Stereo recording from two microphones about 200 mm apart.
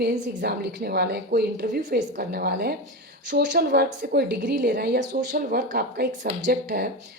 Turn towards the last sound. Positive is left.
turn(degrees=-50)  # may be behind; listen again after turning